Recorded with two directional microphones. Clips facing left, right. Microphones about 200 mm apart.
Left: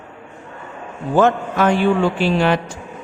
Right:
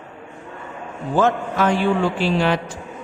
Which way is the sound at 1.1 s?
55° left (ahead or behind).